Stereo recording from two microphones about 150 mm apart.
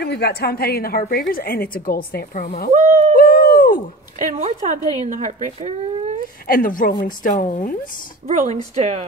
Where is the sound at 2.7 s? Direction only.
55° right (ahead or behind).